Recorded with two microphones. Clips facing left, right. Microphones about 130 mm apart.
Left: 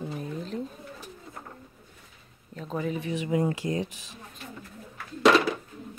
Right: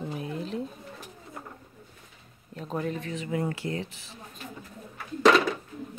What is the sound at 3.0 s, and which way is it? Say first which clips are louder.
Speech: left 4 dB; 15° left (ahead or behind).